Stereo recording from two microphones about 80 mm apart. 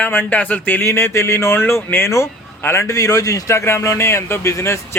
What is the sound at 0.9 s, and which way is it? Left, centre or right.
A man's voice, left.